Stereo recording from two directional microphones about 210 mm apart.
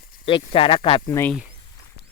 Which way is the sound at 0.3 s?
25° left (ahead or behind).